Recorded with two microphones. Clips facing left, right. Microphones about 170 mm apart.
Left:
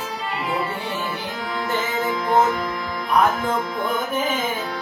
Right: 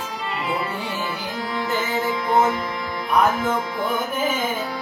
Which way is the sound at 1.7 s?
Centre (ahead or behind).